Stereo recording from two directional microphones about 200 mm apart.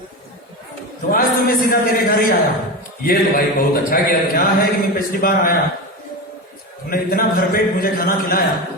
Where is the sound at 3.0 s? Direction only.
45° left (ahead or behind).